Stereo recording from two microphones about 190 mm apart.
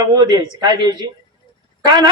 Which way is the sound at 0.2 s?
20° right (ahead or behind).